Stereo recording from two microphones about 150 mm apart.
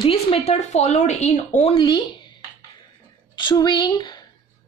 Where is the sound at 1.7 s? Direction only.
35° left (ahead or behind).